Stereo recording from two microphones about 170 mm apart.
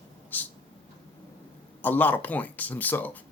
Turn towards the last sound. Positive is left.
turn(degrees=10)  # may be behind; listen again after turning